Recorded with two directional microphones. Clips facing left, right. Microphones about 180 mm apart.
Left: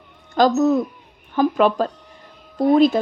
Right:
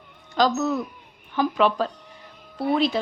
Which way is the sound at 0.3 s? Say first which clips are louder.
Left 6 dB; 45° left (ahead or behind).